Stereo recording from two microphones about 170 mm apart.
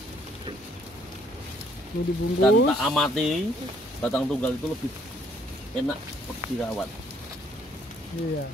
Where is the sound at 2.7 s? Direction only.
5° left (ahead or behind).